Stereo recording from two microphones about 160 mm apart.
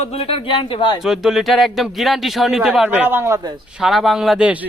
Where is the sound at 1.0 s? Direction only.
Centre (ahead or behind); by 3.5 s 20° right (ahead or behind).